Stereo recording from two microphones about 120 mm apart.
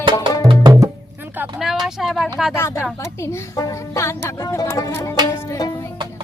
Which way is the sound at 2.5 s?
20° left (ahead or behind).